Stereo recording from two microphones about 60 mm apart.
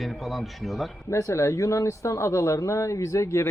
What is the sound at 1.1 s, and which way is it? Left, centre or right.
Speech, left.